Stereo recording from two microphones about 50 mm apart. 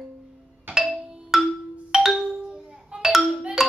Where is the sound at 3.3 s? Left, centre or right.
Centre.